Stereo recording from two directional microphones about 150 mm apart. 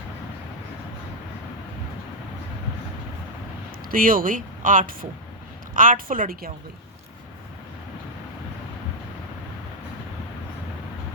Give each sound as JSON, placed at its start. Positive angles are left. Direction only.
{"t": 3.9, "sound": "speech", "side_deg": -65}